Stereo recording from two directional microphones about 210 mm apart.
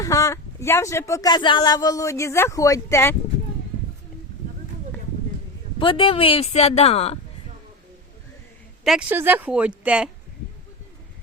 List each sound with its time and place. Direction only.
0.0 s speech: 15° left (ahead or behind)
5.8 s speech: 25° left (ahead or behind)
8.8 s speech: 5° right (ahead or behind)